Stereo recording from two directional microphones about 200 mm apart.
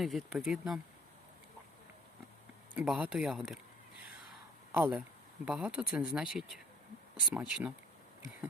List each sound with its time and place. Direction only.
0.0 s speech: centre (ahead or behind)
2.7 s speech: 5° right (ahead or behind)
4.7 s speech: 5° right (ahead or behind)